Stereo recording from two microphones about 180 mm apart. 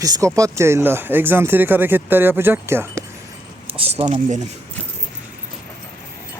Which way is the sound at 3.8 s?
35° right (ahead or behind).